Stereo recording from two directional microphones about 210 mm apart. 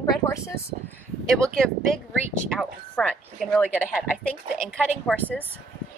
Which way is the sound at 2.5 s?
5° left (ahead or behind).